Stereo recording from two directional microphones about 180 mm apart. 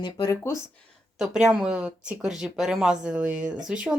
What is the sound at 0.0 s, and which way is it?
Speech, 20° left (ahead or behind).